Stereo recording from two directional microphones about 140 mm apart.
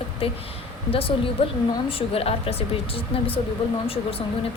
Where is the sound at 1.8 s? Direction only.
40° left (ahead or behind).